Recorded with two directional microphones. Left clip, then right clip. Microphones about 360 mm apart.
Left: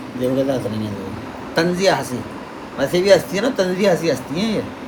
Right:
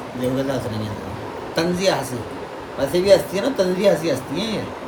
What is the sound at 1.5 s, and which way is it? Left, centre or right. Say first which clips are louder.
A man's voice: left 3 dB; left.